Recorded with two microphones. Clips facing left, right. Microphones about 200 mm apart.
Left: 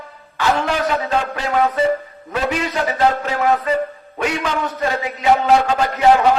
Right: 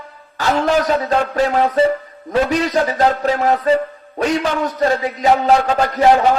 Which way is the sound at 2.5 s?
40° right (ahead or behind).